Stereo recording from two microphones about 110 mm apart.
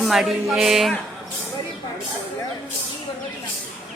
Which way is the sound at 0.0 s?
Centre (ahead or behind).